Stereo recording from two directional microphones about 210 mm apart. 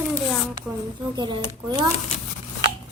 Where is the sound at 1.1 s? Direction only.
20° right (ahead or behind).